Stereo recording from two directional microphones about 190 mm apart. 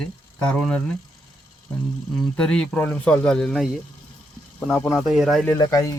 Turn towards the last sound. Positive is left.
turn(degrees=20)  # may be behind; listen again after turning